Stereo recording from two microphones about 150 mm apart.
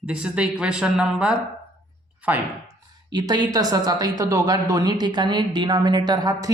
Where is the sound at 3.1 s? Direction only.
25° right (ahead or behind).